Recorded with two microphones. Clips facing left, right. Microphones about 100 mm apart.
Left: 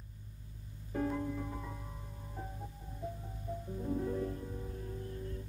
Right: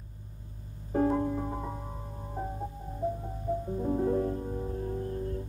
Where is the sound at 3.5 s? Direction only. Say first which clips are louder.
Right 8 dB; 50° right (ahead or behind).